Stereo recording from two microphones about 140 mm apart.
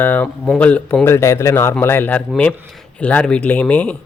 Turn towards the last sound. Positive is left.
turn(degrees=10)  # may be behind; listen again after turning